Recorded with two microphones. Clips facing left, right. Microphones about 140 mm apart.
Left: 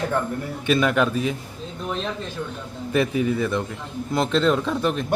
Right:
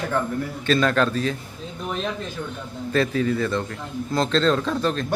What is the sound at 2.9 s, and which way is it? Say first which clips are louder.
Speech: even; 15° left (ahead or behind).